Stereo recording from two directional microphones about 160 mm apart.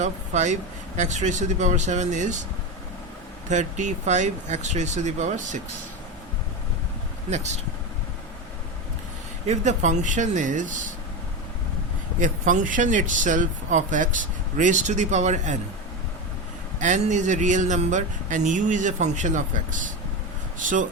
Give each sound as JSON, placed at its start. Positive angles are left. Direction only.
{"t": 0.0, "sound": "speech", "side_deg": -50}
{"t": 3.5, "sound": "speech", "side_deg": -50}
{"t": 7.3, "sound": "speech", "side_deg": -45}
{"t": 9.5, "sound": "speech", "side_deg": -50}
{"t": 12.2, "sound": "speech", "side_deg": -55}
{"t": 16.8, "sound": "speech", "side_deg": -50}